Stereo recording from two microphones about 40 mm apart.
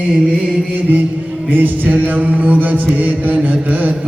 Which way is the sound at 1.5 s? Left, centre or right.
Right.